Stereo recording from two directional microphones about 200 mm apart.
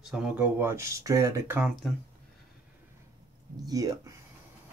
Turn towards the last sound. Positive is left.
turn(degrees=-20)  # may be behind; listen again after turning